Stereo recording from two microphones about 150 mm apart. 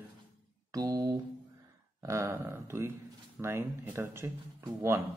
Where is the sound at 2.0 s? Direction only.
20° right (ahead or behind).